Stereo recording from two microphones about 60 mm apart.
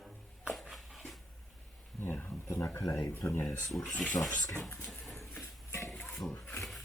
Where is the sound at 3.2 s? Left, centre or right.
Left.